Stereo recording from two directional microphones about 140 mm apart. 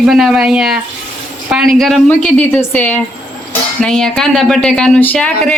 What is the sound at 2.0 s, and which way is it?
Speech, 10° left (ahead or behind).